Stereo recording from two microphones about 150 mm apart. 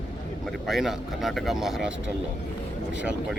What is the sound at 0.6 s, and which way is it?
Speech, centre (ahead or behind).